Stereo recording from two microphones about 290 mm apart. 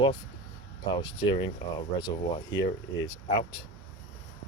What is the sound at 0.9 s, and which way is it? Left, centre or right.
Speech, centre.